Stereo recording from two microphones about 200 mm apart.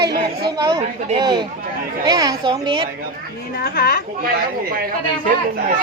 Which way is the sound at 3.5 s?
50° left (ahead or behind).